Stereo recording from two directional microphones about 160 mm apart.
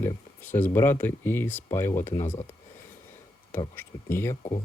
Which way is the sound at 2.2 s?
45° left (ahead or behind).